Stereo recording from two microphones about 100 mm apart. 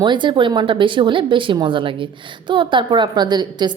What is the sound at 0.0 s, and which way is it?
Speech, 50° right (ahead or behind).